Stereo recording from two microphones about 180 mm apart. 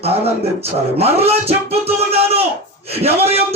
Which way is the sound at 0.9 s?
35° right (ahead or behind).